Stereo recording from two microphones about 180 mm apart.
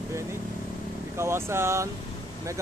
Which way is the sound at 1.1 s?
15° right (ahead or behind).